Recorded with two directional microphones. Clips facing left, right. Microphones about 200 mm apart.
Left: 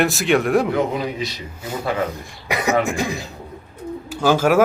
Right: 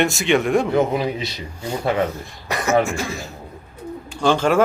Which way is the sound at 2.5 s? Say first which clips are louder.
Right 1 dB; 10° left (ahead or behind).